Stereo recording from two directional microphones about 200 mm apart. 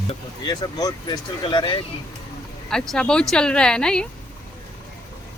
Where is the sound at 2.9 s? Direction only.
5° left (ahead or behind).